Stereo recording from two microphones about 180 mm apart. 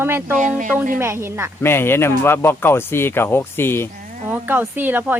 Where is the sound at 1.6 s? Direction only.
10° left (ahead or behind).